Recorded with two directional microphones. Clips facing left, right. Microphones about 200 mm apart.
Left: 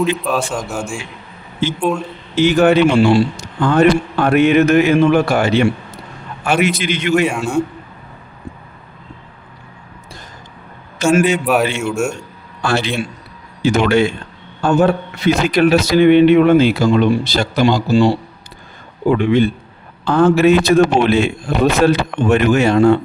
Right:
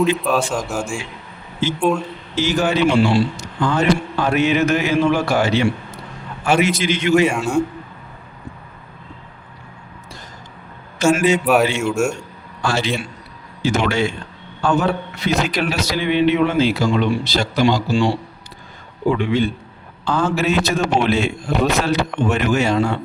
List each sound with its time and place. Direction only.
0.0 s a man's voice: centre (ahead or behind)
2.3 s speech: 60° left (ahead or behind)
7.3 s a man's voice: centre (ahead or behind)
11.0 s speech: 60° left (ahead or behind)
11.4 s a man's voice: centre (ahead or behind)
12.6 s speech: 60° left (ahead or behind)
14.6 s a man's voice: 45° left (ahead or behind)
15.4 s speech: 55° left (ahead or behind)
17.9 s a man's voice: 40° left (ahead or behind)
19.1 s speech: 55° left (ahead or behind)